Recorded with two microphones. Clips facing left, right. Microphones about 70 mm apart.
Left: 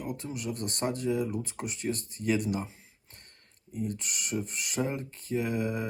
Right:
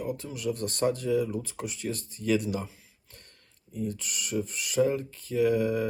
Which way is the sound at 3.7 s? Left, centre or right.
Left.